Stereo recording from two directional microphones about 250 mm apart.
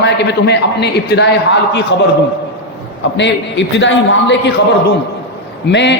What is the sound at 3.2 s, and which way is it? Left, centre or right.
A man's voice, left.